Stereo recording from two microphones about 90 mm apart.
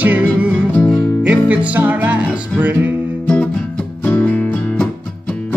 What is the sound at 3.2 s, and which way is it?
Music, 15° left (ahead or behind).